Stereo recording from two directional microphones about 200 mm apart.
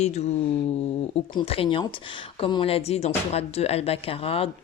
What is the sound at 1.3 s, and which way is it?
Speech, 30° left (ahead or behind).